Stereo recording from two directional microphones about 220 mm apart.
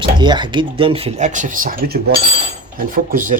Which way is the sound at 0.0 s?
20° right (ahead or behind).